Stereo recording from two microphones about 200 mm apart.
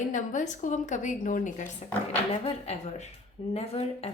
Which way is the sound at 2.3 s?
30° left (ahead or behind).